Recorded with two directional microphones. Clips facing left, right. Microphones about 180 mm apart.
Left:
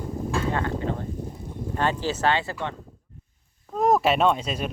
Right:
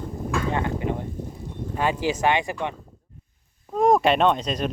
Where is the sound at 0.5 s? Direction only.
15° right (ahead or behind).